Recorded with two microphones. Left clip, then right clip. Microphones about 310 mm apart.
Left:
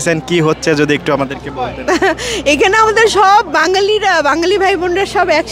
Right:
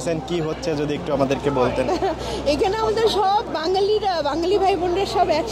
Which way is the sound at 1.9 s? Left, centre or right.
Left.